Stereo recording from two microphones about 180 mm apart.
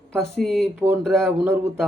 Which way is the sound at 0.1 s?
5° left (ahead or behind).